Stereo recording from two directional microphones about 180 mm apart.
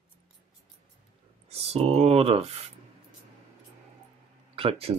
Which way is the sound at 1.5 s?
35° right (ahead or behind).